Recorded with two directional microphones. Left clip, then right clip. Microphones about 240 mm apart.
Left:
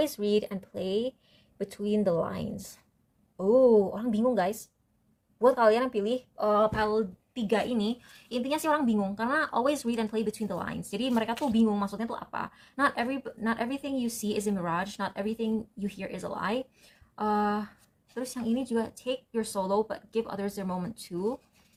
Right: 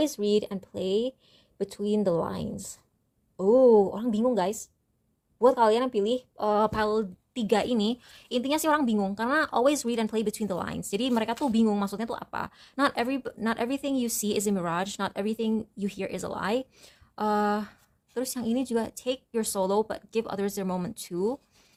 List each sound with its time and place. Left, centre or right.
0.0 s a woman's voice: right
6.6 s a woman's voice: right